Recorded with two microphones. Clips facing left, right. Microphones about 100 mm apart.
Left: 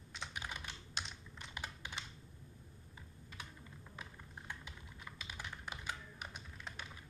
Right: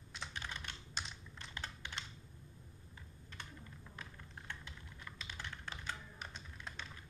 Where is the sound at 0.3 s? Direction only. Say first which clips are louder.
Left 1 dB; 10° left (ahead or behind).